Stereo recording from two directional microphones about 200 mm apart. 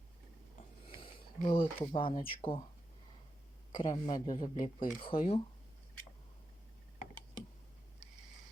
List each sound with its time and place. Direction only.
0.9 s speech: 25° left (ahead or behind)
3.7 s speech: 25° left (ahead or behind)